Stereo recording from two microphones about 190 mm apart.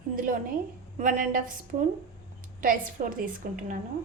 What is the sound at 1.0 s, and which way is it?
Speech, 40° right (ahead or behind).